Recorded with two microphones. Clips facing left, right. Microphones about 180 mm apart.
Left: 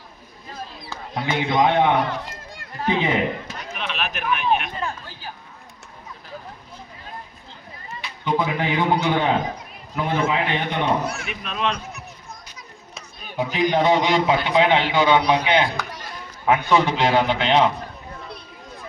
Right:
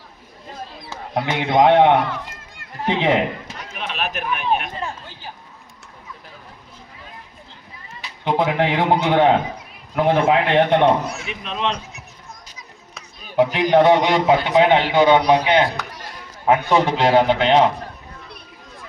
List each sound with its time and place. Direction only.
1.1 s a man's voice: 65° right (ahead or behind)
2.0 s run: 35° left (ahead or behind)
2.8 s a man's voice: 75° right (ahead or behind)
3.8 s speech: 40° right (ahead or behind)
8.2 s a man's voice: 80° right; by 10.9 s 60° right (ahead or behind)
11.2 s speech: 25° right (ahead or behind)
13.3 s a man's voice: 75° right (ahead or behind)
14.3 s a man's voice: 45° right (ahead or behind)
15.2 s a man's voice: 35° right (ahead or behind)